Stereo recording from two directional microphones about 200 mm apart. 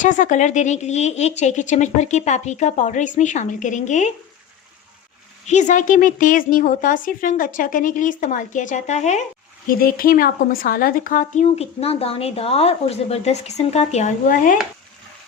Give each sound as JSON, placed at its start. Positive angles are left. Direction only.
{"t": 0.0, "sound": "a woman's voice", "side_deg": 40}
{"t": 5.5, "sound": "a woman's voice", "side_deg": 35}